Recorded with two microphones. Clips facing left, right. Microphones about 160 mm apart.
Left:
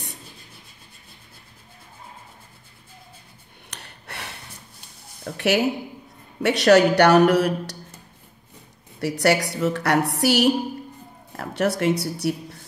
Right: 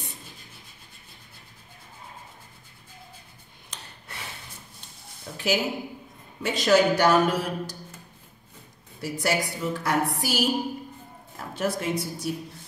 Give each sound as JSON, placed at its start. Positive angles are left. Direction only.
{"t": 3.7, "sound": "gasp", "side_deg": 70}
{"t": 5.2, "sound": "speech", "side_deg": 70}
{"t": 9.0, "sound": "speech", "side_deg": 70}